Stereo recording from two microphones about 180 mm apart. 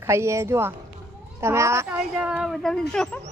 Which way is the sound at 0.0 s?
15° right (ahead or behind).